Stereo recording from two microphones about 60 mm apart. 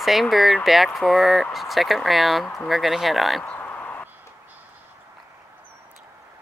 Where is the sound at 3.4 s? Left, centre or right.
Left.